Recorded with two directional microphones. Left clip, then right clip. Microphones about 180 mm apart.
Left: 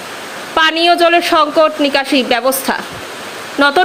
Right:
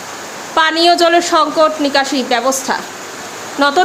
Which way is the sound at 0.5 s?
10° left (ahead or behind).